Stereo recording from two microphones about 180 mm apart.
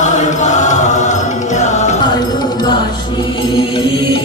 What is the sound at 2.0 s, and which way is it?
Music, 25° left (ahead or behind).